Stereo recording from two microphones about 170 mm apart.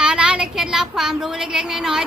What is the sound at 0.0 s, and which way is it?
Speech, 5° right (ahead or behind).